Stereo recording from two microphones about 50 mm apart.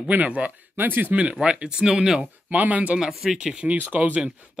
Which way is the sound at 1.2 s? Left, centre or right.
Right.